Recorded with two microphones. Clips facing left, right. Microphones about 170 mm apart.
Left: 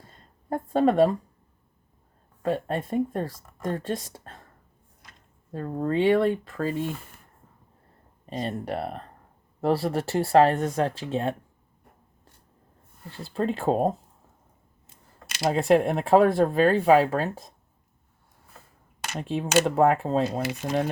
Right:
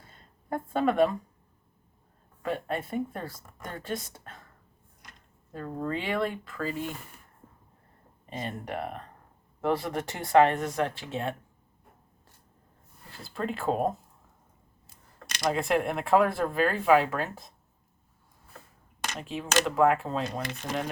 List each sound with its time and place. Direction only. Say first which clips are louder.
0.1 s a sound: left 3 dB; 35° left (ahead or behind)
2.4 s speech: left 5 dB; 35° left (ahead or behind)
5.5 s speech: left 7 dB; 40° left (ahead or behind)
8.3 s speech: left 5 dB; 35° left (ahead or behind)
13.1 s speech: left 6 dB; 35° left (ahead or behind)
15.4 s speech: left 6 dB; 35° left (ahead or behind)
19.2 s speech: left 6 dB; 30° left (ahead or behind)